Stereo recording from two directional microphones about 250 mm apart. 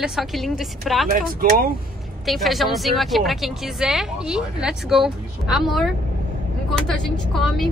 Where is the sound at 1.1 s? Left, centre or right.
Right.